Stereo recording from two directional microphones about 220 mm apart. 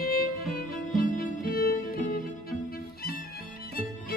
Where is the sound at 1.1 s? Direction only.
40° left (ahead or behind).